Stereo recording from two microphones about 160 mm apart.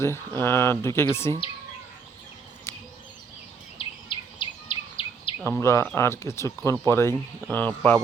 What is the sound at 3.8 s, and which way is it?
Insect, 30° left (ahead or behind).